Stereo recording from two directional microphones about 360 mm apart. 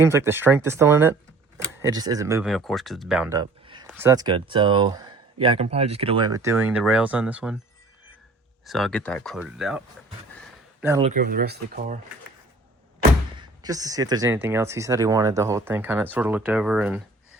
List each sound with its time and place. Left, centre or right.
0.0 s speech: centre
8.6 s speech: centre
11.1 s speech: right
13.6 s speech: centre